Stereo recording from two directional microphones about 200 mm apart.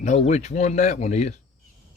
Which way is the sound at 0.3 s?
35° left (ahead or behind).